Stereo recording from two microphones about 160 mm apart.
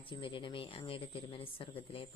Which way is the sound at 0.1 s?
30° left (ahead or behind).